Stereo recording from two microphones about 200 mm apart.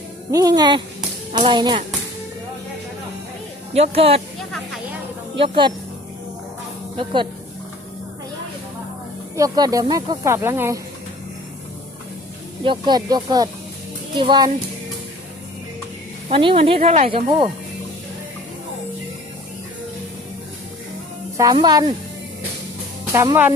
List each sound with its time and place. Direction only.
0.3 s speech: 15° right (ahead or behind)
3.8 s speech: 30° right (ahead or behind)
5.4 s speech: 25° right (ahead or behind)
6.9 s speech: 25° right (ahead or behind)
9.3 s speech: 15° right (ahead or behind)
12.6 s speech: 25° right (ahead or behind)
16.3 s speech: 25° right (ahead or behind)
21.3 s speech: 20° right (ahead or behind)
23.1 s speech: 15° right (ahead or behind)